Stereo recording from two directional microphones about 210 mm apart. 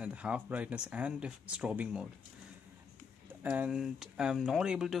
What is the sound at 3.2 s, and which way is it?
Speech, 10° right (ahead or behind).